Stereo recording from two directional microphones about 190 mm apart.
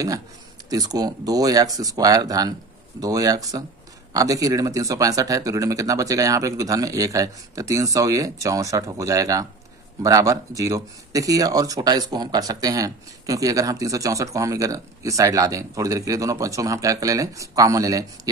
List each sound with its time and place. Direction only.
0.7 s speech: 20° right (ahead or behind)